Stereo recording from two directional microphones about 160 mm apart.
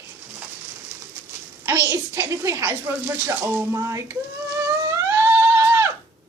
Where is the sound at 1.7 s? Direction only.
15° right (ahead or behind).